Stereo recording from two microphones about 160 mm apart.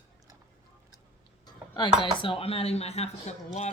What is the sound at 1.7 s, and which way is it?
Chopping, 30° left (ahead or behind).